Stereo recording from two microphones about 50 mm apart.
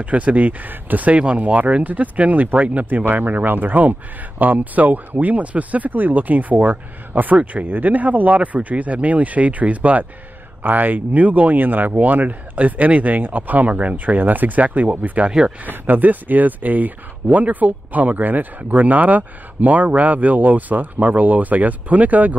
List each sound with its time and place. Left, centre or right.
0.0 s speech: right